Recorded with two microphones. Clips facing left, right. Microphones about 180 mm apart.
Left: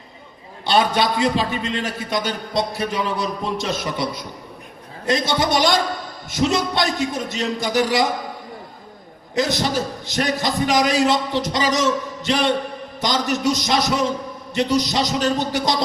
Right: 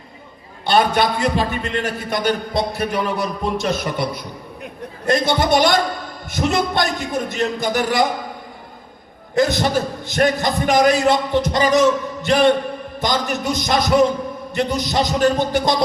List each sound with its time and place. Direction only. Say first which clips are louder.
0.6 s a man's voice: right 2 dB; 55° right (ahead or behind)
9.3 s a man's voice: right 4 dB; 55° right (ahead or behind)